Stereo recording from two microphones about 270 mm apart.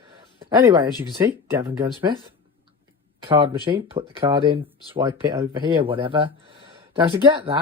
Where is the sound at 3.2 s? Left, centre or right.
Centre.